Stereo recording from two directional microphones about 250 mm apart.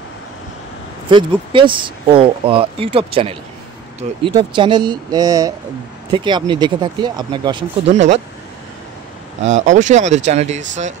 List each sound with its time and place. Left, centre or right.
1.0 s speech: centre
9.5 s speech: right